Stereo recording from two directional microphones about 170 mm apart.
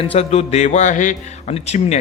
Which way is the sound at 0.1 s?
40° left (ahead or behind).